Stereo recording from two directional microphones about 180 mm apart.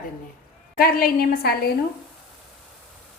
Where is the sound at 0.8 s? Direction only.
55° left (ahead or behind).